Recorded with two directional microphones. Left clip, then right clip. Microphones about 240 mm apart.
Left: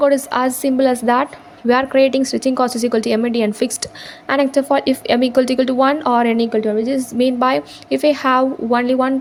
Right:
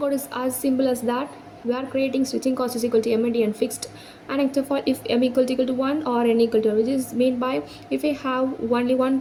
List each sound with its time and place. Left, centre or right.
0.0 s a woman's voice: left